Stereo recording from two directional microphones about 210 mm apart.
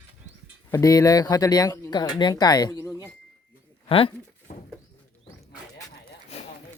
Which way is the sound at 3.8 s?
25° left (ahead or behind).